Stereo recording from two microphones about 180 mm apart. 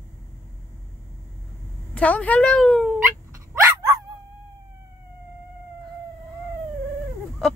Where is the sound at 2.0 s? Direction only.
10° left (ahead or behind).